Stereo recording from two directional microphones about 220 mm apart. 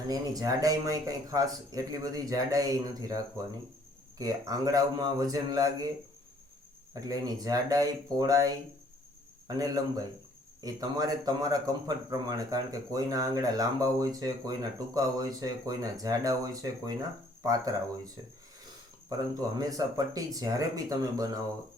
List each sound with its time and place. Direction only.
0.1 s speech: 15° right (ahead or behind)
6.9 s speech: 15° right (ahead or behind)
9.5 s speech: 15° right (ahead or behind)
19.1 s speech: 15° right (ahead or behind)